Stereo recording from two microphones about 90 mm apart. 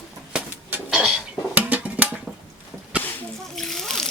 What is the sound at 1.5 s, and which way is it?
Music, 15° right (ahead or behind).